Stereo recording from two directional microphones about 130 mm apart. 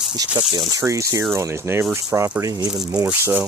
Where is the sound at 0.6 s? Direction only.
25° right (ahead or behind).